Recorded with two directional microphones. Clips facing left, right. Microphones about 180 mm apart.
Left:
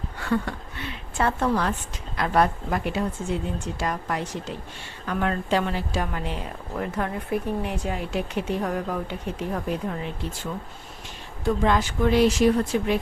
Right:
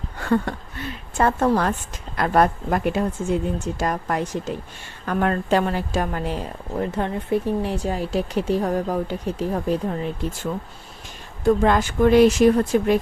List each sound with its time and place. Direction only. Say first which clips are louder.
0.2 s a sound: right 4 dB; 45° right (ahead or behind)
2.1 s a woman's voice: right 3 dB; 50° right (ahead or behind)
11.4 s speech: right 5 dB; 50° right (ahead or behind)